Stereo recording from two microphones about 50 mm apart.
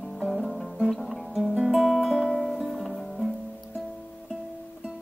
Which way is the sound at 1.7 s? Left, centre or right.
Centre.